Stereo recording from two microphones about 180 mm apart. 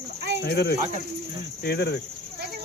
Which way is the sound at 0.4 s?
60° left (ahead or behind).